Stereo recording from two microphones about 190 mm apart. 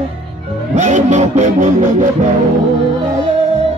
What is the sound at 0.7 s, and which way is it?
Music, 40° right (ahead or behind).